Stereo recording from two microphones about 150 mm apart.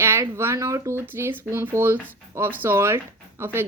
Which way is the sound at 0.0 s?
15° right (ahead or behind).